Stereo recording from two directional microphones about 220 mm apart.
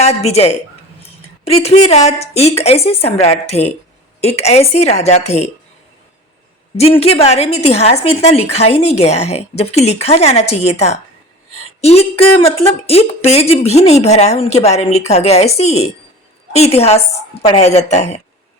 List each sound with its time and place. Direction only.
0.0 s speech: 30° left (ahead or behind)
6.7 s speech: 25° left (ahead or behind)